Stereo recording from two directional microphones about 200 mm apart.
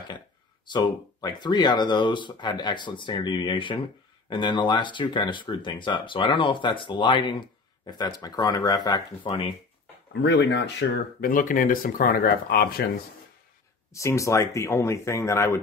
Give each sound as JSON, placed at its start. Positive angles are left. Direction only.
{"t": 0.7, "sound": "speech", "side_deg": 20}
{"t": 10.2, "sound": "speech", "side_deg": 60}
{"t": 11.1, "sound": "speech", "side_deg": 45}
{"t": 13.9, "sound": "speech", "side_deg": 15}